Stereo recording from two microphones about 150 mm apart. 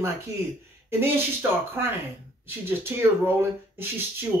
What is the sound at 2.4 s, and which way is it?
Speech, 15° right (ahead or behind).